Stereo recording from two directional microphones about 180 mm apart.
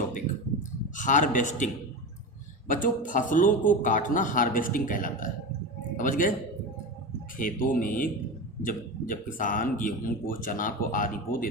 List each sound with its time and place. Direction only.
0.9 s speech: 45° left (ahead or behind)
7.3 s speech: 50° left (ahead or behind)